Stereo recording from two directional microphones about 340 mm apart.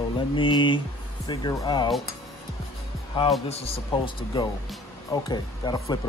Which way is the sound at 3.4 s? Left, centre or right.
Centre.